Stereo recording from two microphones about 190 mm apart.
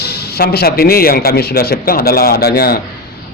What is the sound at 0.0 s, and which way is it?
A man's voice, 55° left (ahead or behind).